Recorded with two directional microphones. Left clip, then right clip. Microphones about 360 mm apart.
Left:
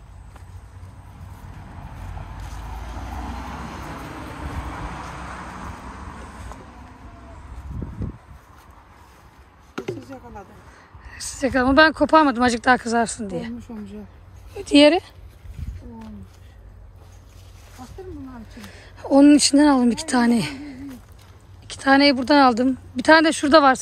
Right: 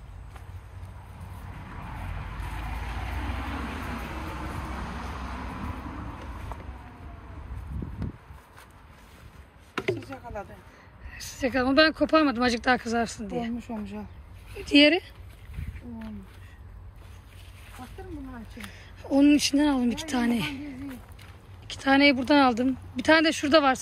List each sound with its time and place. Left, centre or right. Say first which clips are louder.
3.3 s vehicle: left 1 dB; left
9.8 s chop: right 1 dB; centre
11.1 s speech: left 5 dB; centre
18.6 s speech: left 6 dB; centre